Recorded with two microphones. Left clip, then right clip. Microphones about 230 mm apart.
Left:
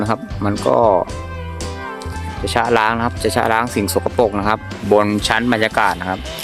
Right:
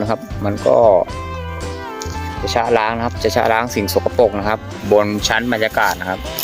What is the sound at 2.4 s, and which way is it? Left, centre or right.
Speech, centre.